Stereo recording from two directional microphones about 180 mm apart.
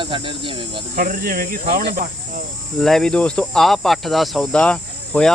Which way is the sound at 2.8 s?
5° left (ahead or behind).